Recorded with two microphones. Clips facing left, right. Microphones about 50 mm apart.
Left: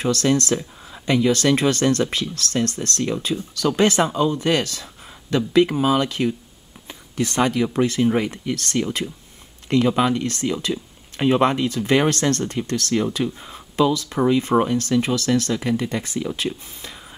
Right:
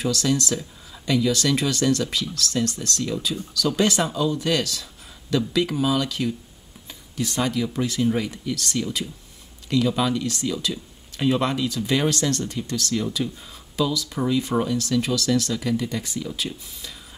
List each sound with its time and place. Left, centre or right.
0.0 s speech: left
6.9 s speech: left